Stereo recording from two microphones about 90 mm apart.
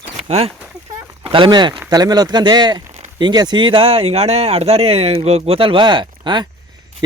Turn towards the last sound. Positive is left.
turn(degrees=-60)  # may be behind; listen again after turning